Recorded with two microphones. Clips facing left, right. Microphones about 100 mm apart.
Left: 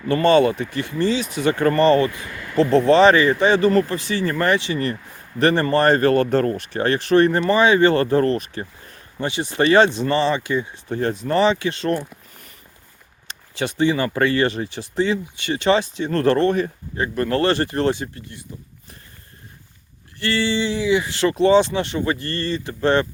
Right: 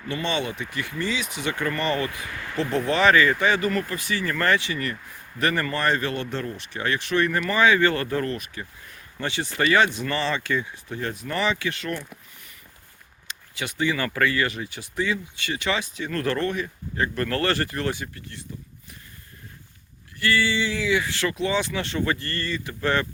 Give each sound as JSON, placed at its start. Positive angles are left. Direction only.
{"t": 0.1, "sound": "speech", "side_deg": 40}
{"t": 9.2, "sound": "speech", "side_deg": 20}
{"t": 9.6, "sound": "speech", "side_deg": 30}
{"t": 10.8, "sound": "speech", "side_deg": 35}
{"t": 13.2, "sound": "speech", "side_deg": 35}
{"t": 17.0, "sound": "speech", "side_deg": 20}
{"t": 20.1, "sound": "speech", "side_deg": 30}